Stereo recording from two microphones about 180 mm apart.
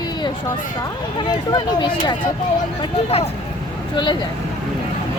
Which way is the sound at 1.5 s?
25° left (ahead or behind).